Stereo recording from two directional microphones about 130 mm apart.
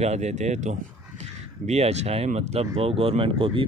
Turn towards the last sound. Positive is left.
turn(degrees=-40)  # may be behind; listen again after turning